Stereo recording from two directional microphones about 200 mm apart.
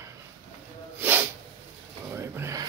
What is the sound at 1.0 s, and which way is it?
Snort, 10° right (ahead or behind).